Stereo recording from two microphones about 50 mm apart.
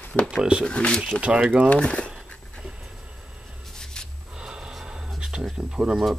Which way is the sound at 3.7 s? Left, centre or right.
Centre.